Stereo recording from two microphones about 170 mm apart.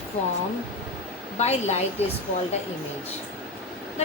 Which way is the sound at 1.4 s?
40° left (ahead or behind).